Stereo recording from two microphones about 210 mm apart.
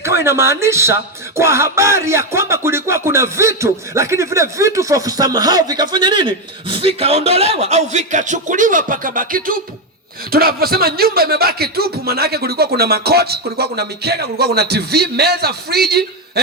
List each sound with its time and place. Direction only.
0.0 s speech: 10° right (ahead or behind); by 16.4 s 50° right (ahead or behind)